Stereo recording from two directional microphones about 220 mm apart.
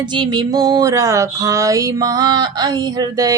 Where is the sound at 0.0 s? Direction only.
20° right (ahead or behind).